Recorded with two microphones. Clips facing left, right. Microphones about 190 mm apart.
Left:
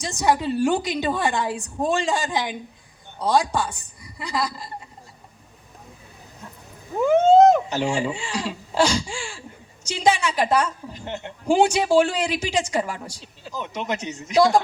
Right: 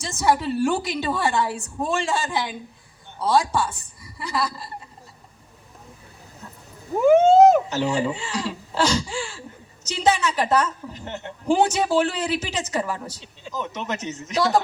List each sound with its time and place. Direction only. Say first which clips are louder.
0.0 s a woman's voice: even; 15° left (ahead or behind)
7.1 s vehicle: right 1 dB; 10° right (ahead or behind)
7.7 s a woman's voice: right 1 dB; 15° left (ahead or behind)